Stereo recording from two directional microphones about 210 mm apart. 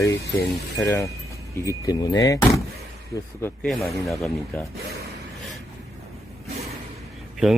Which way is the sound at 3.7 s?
Centre (ahead or behind).